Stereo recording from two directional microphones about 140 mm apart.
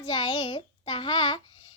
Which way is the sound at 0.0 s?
35° left (ahead or behind).